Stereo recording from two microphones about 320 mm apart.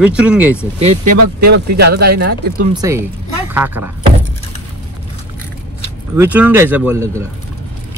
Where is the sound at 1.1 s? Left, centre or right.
Right.